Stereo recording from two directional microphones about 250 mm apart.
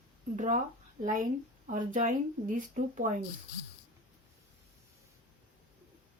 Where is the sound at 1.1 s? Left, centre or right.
Right.